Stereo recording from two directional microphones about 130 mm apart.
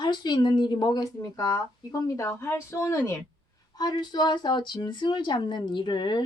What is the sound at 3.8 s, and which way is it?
Speech, 35° left (ahead or behind).